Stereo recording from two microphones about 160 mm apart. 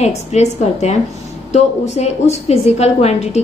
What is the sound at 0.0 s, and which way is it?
A woman's voice, 45° left (ahead or behind).